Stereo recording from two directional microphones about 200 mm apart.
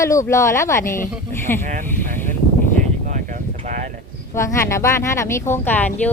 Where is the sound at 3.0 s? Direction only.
40° right (ahead or behind).